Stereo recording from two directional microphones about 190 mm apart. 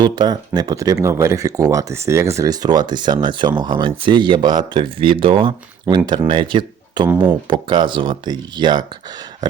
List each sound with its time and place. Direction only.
0.0 s speech: 20° right (ahead or behind)
7.1 s speech: 10° right (ahead or behind)
7.4 s speech: 25° right (ahead or behind)